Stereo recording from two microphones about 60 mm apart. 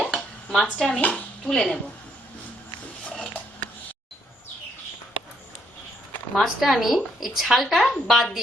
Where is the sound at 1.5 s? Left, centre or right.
Centre.